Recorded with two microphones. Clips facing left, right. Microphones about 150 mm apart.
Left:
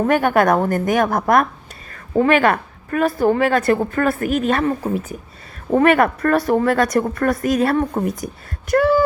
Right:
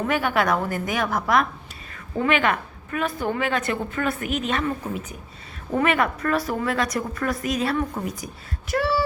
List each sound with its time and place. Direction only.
0.0 s a woman's voice: 50° left (ahead or behind)